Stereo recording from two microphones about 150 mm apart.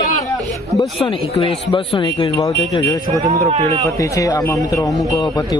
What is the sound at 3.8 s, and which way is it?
Speech, 20° left (ahead or behind).